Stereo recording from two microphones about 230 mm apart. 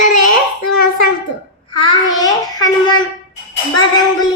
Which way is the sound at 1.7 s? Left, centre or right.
Centre.